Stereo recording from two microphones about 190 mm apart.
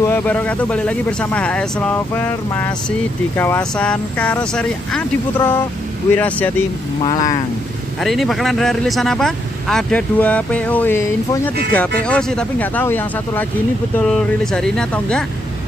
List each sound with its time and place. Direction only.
0.0 s speech: 10° left (ahead or behind)
7.0 s speech: 20° left (ahead or behind)
8.0 s speech: centre (ahead or behind)